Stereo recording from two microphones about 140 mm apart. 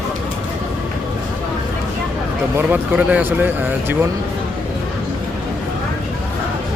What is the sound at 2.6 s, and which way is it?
A man's voice, 10° right (ahead or behind).